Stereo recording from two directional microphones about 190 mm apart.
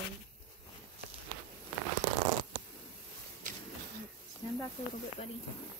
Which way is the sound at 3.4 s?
40° right (ahead or behind).